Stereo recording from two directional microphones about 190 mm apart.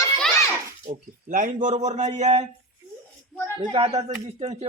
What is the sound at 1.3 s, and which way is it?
A man's voice, 45° right (ahead or behind).